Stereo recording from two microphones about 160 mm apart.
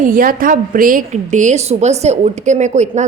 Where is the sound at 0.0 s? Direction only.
60° right (ahead or behind).